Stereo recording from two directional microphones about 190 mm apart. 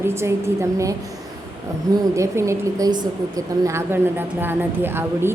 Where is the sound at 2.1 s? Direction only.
15° right (ahead or behind).